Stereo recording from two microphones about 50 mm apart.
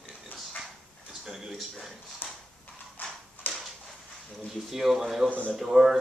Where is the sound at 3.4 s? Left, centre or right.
Left.